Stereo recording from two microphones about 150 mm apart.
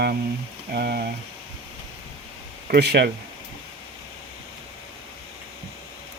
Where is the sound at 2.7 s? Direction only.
90° right.